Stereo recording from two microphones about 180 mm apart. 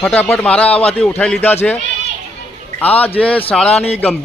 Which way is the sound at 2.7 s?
10° left (ahead or behind).